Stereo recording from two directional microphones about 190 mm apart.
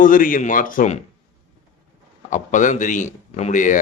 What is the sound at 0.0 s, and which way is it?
Speech, 45° left (ahead or behind).